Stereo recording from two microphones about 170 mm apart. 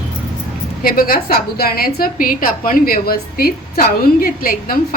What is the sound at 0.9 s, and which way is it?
A woman's voice, 60° left (ahead or behind).